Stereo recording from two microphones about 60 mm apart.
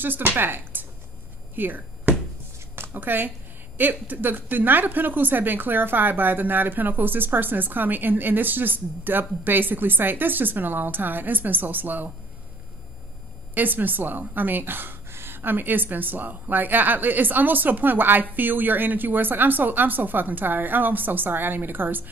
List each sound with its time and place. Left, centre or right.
0.0 s speech: right
1.5 s a sound: right
3.7 s speech: right
13.6 s speech: right